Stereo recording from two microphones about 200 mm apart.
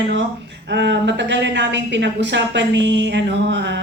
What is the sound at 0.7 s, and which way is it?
A woman's voice, 60° right (ahead or behind).